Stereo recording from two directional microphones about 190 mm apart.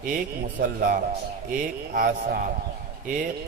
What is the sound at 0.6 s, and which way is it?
A man's voice, 50° right (ahead or behind).